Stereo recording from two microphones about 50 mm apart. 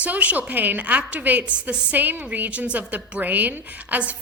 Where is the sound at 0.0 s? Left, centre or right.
Right.